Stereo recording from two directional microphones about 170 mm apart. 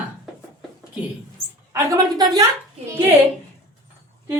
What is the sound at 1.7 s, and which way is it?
Speech, 20° right (ahead or behind).